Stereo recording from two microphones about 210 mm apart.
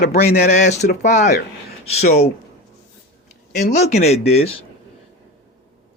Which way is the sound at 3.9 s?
30° left (ahead or behind).